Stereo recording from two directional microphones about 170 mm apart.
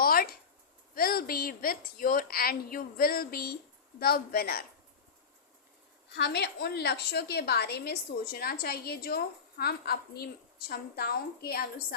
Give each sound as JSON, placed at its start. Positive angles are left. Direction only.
{"t": 0.0, "sound": "a sound", "side_deg": 60}
{"t": 0.9, "sound": "a woman's voice", "side_deg": 60}
{"t": 6.1, "sound": "a woman's voice", "side_deg": 80}